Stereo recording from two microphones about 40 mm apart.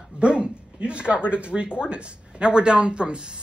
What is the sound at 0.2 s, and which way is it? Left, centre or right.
Speech, right.